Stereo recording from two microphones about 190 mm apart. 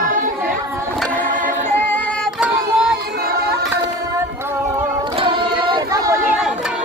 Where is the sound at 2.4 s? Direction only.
5° right (ahead or behind).